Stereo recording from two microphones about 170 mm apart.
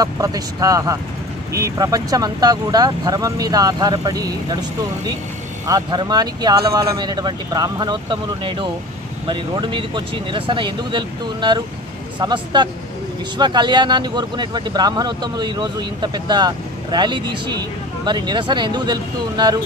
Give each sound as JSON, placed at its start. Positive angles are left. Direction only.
{"t": 0.0, "sound": "speech", "side_deg": -20}